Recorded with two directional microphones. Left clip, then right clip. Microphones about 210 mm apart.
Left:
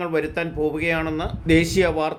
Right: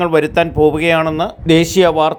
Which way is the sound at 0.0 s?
35° right (ahead or behind).